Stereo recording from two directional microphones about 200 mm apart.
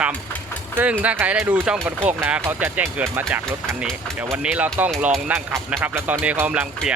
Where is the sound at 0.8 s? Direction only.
5° right (ahead or behind).